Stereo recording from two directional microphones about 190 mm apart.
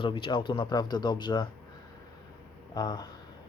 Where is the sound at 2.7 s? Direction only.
20° left (ahead or behind).